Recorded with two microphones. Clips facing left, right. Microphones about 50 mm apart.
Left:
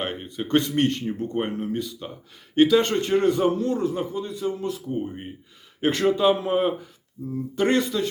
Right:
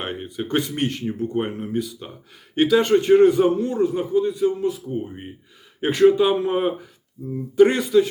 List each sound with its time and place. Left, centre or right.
0.0 s a man's voice: centre